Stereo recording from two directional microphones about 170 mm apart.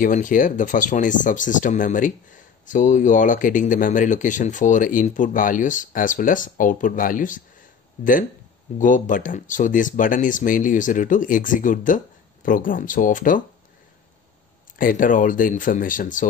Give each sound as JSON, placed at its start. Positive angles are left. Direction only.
{"t": 0.0, "sound": "speech", "side_deg": 50}
{"t": 14.8, "sound": "speech", "side_deg": 50}